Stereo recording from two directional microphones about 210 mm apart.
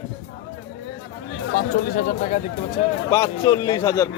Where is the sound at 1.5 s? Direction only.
40° left (ahead or behind).